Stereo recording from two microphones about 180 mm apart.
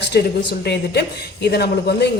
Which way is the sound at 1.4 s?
65° left (ahead or behind).